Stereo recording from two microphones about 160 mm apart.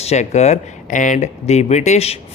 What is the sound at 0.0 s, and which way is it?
Speech, 45° left (ahead or behind).